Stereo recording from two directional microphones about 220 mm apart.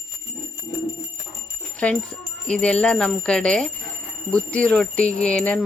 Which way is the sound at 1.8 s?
5° left (ahead or behind).